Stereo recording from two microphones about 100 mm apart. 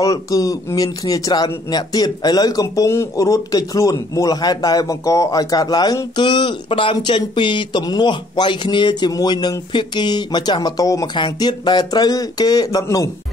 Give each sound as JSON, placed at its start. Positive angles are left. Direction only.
{"t": 0.0, "sound": "speech", "side_deg": 35}
{"t": 11.1, "sound": "speech", "side_deg": 50}